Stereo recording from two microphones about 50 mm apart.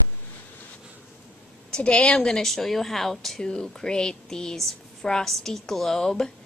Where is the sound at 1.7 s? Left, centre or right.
Centre.